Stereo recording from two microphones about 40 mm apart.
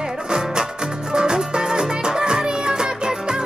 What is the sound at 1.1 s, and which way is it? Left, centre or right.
Music, right.